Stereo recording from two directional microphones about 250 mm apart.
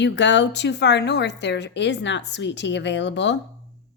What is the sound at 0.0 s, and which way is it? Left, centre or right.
A woman's voice, left.